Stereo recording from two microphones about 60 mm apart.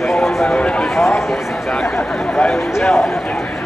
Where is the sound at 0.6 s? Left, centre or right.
Centre.